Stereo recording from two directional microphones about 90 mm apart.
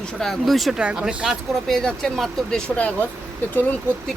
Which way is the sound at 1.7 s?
5° left (ahead or behind).